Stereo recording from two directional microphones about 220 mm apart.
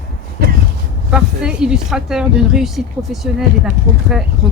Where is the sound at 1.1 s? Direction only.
5° right (ahead or behind).